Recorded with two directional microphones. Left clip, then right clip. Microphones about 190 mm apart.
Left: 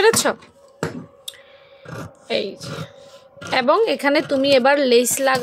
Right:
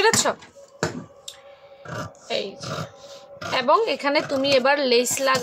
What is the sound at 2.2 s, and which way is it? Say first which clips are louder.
A woman's voice: left 5 dB; 35° left (ahead or behind).